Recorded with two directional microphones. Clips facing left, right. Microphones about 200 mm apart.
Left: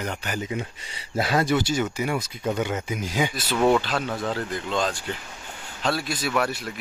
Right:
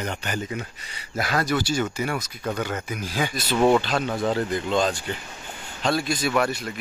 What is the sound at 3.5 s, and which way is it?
Speech, 20° right (ahead or behind).